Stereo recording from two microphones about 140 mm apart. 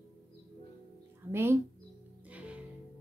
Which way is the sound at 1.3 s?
15° right (ahead or behind).